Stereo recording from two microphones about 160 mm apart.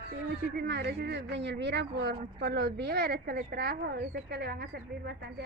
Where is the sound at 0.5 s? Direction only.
90° right.